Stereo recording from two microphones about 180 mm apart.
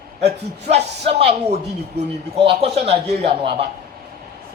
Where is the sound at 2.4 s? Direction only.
35° right (ahead or behind).